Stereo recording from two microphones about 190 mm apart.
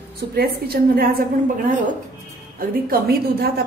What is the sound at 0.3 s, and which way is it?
Speech, 55° right (ahead or behind).